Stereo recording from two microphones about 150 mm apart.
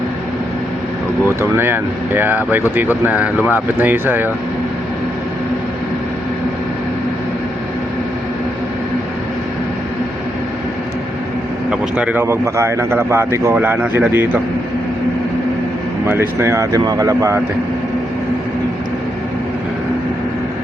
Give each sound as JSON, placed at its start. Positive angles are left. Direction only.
{"t": 1.4, "sound": "speech", "side_deg": -15}
{"t": 11.7, "sound": "speech", "side_deg": -10}
{"t": 16.4, "sound": "speech", "side_deg": -20}